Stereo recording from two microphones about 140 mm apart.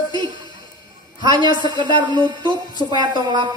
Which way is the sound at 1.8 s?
30° right (ahead or behind).